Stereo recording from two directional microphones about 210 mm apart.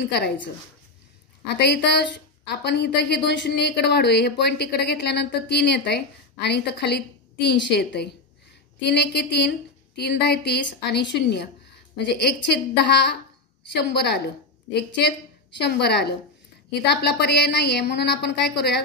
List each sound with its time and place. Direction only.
0.0 s a woman's voice: 50° left (ahead or behind)
1.5 s a woman's voice: 55° left (ahead or behind)